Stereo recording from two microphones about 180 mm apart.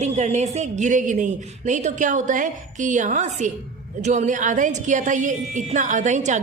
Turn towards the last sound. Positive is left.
turn(degrees=-40)  # may be behind; listen again after turning